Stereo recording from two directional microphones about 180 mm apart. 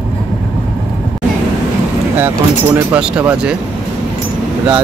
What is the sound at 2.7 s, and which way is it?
Speech, 5° right (ahead or behind).